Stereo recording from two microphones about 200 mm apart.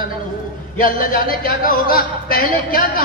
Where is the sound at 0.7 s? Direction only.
45° left (ahead or behind).